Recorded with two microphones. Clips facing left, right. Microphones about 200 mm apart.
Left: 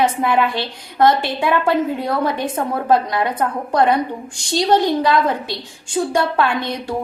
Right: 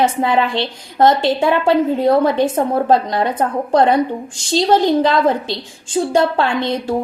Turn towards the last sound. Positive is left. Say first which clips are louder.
# right 2 dB
turn(degrees=-25)  # may be behind; listen again after turning